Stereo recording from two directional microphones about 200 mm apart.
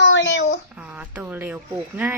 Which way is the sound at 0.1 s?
70° left (ahead or behind).